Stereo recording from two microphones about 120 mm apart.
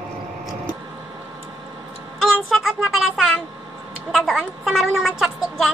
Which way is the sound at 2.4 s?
Centre (ahead or behind).